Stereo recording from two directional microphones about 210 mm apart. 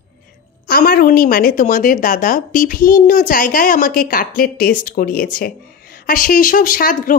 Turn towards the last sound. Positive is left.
turn(degrees=40)  # may be behind; listen again after turning